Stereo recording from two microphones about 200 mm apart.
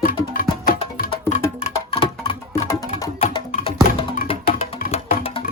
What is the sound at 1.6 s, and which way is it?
Music, 30° left (ahead or behind).